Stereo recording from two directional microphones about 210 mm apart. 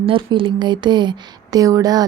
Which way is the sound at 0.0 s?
25° right (ahead or behind).